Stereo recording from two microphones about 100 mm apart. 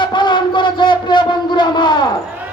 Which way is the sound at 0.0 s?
50° left (ahead or behind).